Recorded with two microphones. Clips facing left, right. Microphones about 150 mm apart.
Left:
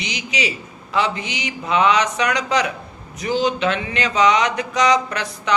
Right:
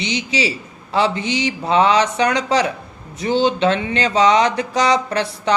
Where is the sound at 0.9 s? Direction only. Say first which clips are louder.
Right 4 dB; 30° right (ahead or behind).